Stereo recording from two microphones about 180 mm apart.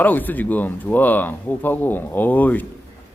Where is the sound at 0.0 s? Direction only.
10° left (ahead or behind).